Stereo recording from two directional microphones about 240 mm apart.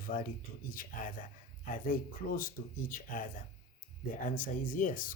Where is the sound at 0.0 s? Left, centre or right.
Left.